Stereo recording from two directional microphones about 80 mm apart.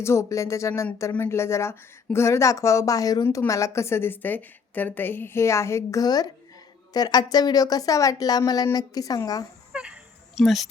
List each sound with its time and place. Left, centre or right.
0.0 s a woman's voice: left
6.0 s speech: left
9.7 s a sound: centre
10.4 s speech: centre